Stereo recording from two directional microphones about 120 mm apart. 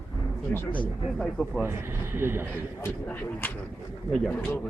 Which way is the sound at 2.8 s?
15° left (ahead or behind).